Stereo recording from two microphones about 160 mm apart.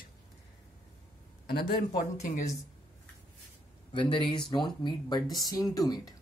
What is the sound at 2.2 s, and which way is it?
Speech, 55° left (ahead or behind).